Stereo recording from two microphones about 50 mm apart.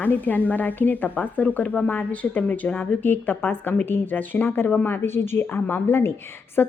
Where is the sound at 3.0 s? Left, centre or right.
Left.